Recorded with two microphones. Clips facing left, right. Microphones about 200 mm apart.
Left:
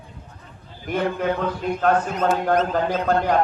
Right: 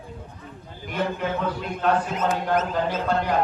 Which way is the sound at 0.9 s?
55° left (ahead or behind).